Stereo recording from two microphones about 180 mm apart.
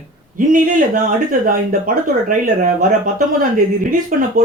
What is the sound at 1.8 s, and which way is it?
Speech, 50° right (ahead or behind).